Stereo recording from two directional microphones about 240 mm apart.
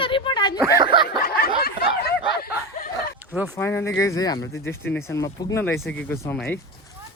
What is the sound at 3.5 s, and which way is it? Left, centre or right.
Speech, centre.